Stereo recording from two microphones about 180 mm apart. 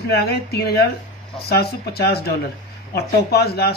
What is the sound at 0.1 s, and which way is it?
Speech, 60° left (ahead or behind).